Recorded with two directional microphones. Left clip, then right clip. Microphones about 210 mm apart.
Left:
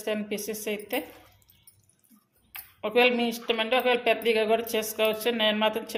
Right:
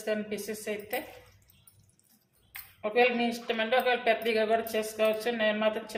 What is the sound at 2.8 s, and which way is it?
A woman's voice, 40° left (ahead or behind).